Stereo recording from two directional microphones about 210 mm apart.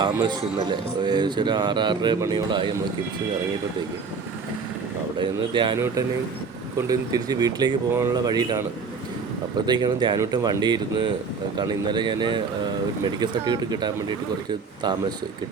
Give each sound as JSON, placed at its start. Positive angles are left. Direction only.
{"t": 0.0, "sound": "speech", "side_deg": -20}
{"t": 5.1, "sound": "speech", "side_deg": -20}
{"t": 9.6, "sound": "speech", "side_deg": -20}